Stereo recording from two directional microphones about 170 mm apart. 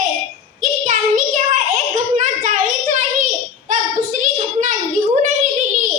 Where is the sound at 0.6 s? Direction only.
45° right (ahead or behind).